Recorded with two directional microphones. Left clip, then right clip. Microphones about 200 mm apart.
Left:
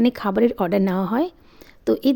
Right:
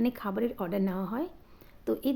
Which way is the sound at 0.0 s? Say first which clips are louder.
Left 12 dB; 45° left (ahead or behind).